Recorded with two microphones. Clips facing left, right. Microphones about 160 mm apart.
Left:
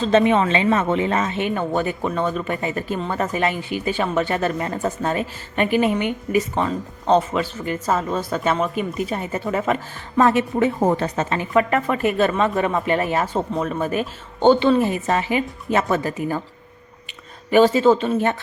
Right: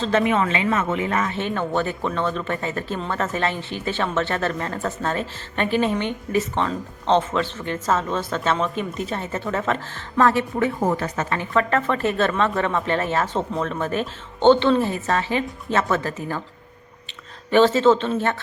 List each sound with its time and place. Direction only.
0.0 s speech: 25° left (ahead or behind)
11.3 s speech: 10° left (ahead or behind)
17.5 s speech: 10° left (ahead or behind)